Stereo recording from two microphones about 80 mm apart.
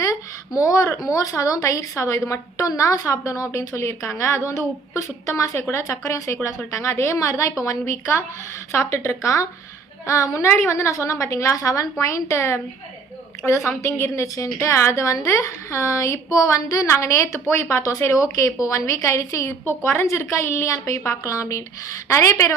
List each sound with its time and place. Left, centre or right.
0.0 s a sound: left
1.1 s a woman's voice: left
13.7 s a woman's voice: left